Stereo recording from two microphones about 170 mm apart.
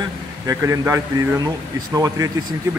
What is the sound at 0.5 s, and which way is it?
A man's voice, 15° right (ahead or behind).